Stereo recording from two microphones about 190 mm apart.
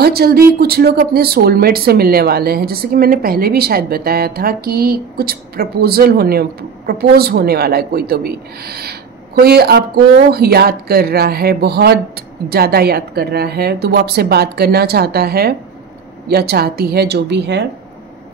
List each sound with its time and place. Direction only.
0.0 s a woman's voice: 55° right (ahead or behind)